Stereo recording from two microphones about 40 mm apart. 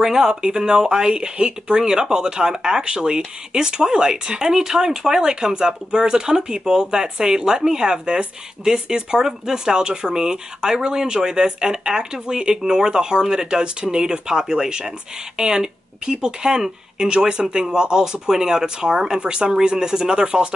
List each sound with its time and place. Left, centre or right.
0.0 s speech: centre